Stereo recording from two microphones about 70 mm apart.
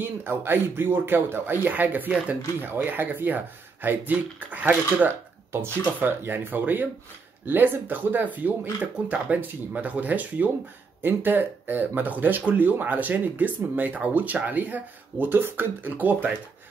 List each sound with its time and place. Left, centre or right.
0.0 s speech: right